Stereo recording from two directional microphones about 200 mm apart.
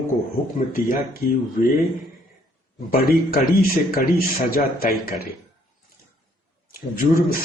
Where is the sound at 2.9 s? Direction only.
45° left (ahead or behind).